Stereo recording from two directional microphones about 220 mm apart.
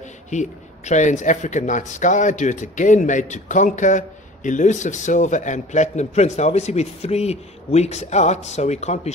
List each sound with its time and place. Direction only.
0.3 s speech: 35° left (ahead or behind)